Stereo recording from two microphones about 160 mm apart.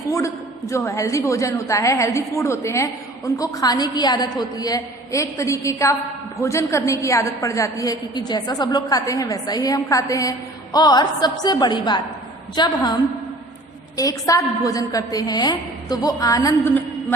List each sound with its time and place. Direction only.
0.7 s a woman's voice: 20° left (ahead or behind)